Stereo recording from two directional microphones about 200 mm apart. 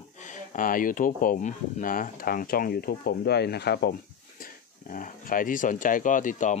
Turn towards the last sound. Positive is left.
turn(degrees=40)  # may be behind; listen again after turning